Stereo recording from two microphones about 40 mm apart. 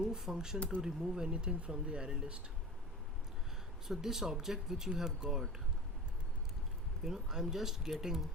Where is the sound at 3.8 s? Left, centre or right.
Centre.